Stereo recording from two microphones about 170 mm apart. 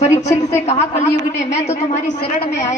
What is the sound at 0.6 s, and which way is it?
A man's voice, 40° left (ahead or behind).